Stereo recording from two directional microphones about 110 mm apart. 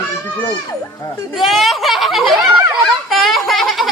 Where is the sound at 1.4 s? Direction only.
Centre (ahead or behind).